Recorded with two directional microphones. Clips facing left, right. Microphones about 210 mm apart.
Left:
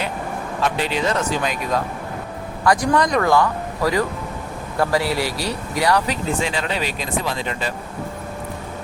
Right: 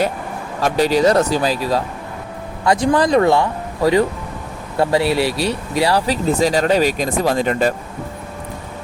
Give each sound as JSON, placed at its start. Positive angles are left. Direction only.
{"t": 0.6, "sound": "speech", "side_deg": -40}